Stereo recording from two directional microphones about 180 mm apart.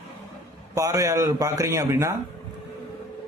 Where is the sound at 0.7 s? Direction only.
20° right (ahead or behind).